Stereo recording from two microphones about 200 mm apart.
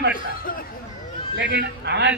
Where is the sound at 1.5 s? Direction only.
60° right (ahead or behind).